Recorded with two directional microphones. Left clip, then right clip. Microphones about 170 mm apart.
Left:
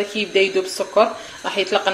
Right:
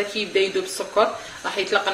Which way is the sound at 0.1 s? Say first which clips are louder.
Left 4 dB; 35° left (ahead or behind).